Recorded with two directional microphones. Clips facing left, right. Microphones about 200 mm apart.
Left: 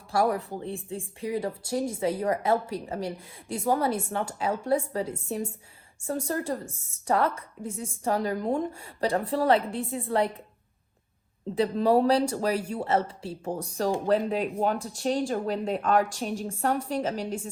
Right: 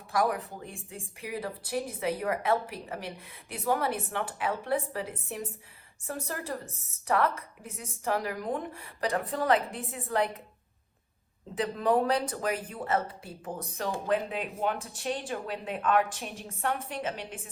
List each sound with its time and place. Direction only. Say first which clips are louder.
0.1 s a woman's voice: left 3 dB; 30° left (ahead or behind)
11.5 s a woman's voice: left 4 dB; 30° left (ahead or behind)